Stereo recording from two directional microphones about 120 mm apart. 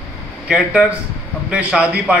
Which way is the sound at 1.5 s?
10° right (ahead or behind).